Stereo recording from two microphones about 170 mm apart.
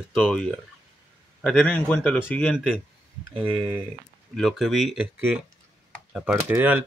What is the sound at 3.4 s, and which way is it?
Speech, 30° right (ahead or behind).